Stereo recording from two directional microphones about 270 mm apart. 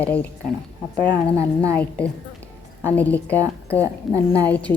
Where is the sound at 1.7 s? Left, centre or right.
Centre.